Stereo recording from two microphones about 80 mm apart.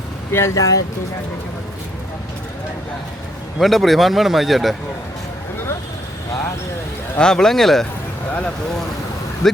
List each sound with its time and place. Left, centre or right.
0.3 s speech: left
0.5 s speech: left
3.6 s speech: centre
7.2 s speech: centre